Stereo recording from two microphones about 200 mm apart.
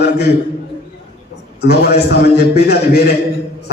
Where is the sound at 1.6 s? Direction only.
50° left (ahead or behind).